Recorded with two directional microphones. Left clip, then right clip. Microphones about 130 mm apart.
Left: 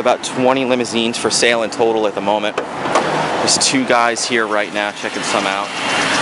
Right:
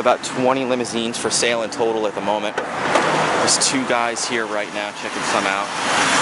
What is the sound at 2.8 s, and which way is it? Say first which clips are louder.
Vehicle: left 1 dB; 20° right (ahead or behind).